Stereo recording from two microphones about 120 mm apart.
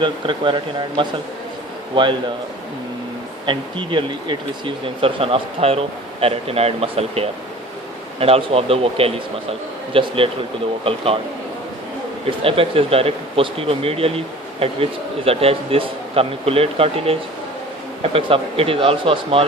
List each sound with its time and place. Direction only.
0.0 s speech: 40° right (ahead or behind)
3.4 s speech: 45° right (ahead or behind)
12.4 s speech: 50° right (ahead or behind)